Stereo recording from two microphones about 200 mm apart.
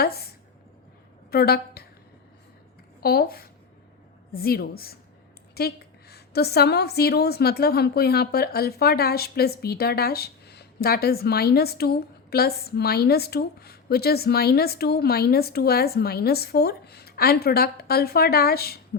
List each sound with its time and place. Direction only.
1.3 s a woman's voice: 50° left (ahead or behind)
3.0 s a woman's voice: 50° left (ahead or behind)